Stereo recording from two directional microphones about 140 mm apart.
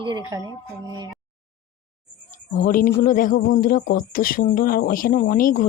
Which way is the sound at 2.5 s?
75° left (ahead or behind).